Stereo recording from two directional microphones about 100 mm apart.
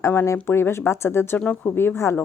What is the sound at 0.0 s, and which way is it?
Speech, 25° left (ahead or behind).